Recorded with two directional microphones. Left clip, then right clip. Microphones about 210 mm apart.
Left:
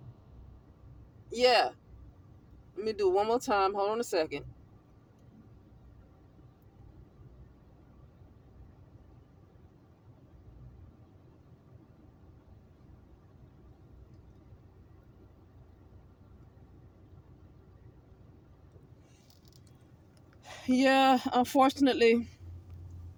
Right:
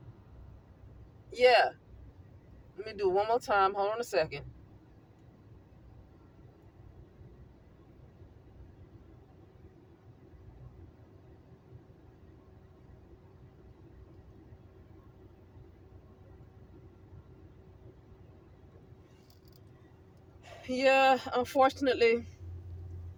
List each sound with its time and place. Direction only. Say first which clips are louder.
1.3 s speech: right 1 dB; 25° left (ahead or behind)
2.8 s speech: left 2 dB; 30° left (ahead or behind)
20.4 s speech: left 1 dB; 30° left (ahead or behind)